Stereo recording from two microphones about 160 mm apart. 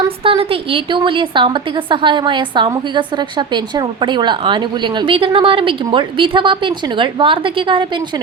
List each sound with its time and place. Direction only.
0.3 s a woman's voice: 35° right (ahead or behind)